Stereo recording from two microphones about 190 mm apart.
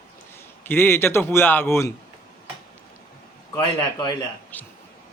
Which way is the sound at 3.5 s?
20° left (ahead or behind).